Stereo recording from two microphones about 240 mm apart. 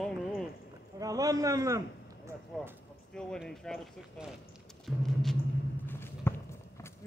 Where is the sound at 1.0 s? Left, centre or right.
Centre.